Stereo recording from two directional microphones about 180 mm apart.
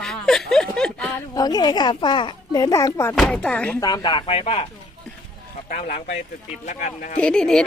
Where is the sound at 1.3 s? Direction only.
20° left (ahead or behind).